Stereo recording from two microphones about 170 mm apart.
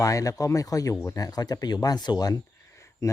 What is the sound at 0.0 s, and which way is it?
Speech, 20° left (ahead or behind).